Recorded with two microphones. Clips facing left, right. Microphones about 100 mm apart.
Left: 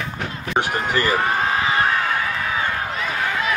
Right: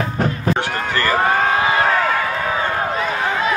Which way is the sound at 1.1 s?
35° right (ahead or behind).